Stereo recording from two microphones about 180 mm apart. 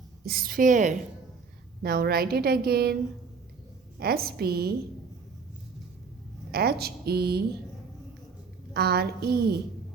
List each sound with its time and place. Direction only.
0.3 s a woman's voice: 55° right (ahead or behind)
1.8 s a woman's voice: 55° right (ahead or behind)
4.0 s a woman's voice: 60° right (ahead or behind)
6.5 s a woman's voice: 60° right (ahead or behind)
8.7 s a woman's voice: 60° right (ahead or behind)